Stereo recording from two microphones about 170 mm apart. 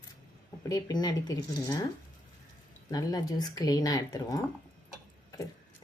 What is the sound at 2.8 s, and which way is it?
Speech, 20° left (ahead or behind).